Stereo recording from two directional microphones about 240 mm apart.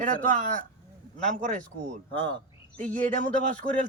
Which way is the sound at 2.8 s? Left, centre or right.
Right.